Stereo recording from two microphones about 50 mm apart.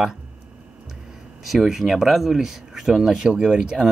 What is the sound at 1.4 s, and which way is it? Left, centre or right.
Speech, centre.